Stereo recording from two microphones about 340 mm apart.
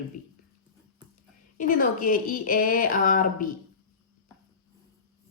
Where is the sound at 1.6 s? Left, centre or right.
Left.